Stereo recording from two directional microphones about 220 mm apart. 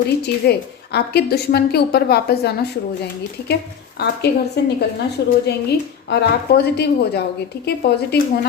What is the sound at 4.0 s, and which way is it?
A woman's voice, 50° left (ahead or behind).